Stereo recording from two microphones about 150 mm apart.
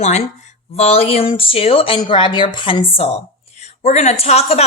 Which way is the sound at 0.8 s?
40° left (ahead or behind).